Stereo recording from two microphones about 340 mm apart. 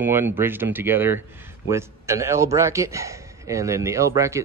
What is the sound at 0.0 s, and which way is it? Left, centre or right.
A man's voice, centre.